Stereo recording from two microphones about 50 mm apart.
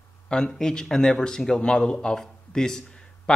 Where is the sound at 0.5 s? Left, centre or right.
Centre.